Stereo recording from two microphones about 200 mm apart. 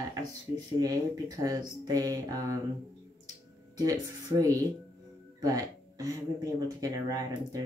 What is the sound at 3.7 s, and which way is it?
Speech, 15° right (ahead or behind).